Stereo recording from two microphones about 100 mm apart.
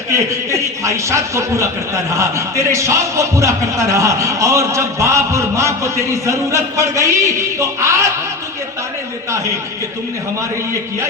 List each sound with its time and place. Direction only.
0.1 s speech: 30° right (ahead or behind)